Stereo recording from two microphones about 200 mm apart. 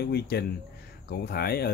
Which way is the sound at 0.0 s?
55° left (ahead or behind).